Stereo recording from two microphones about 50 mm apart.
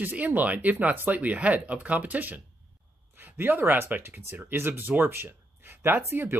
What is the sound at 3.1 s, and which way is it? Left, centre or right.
Speech, right.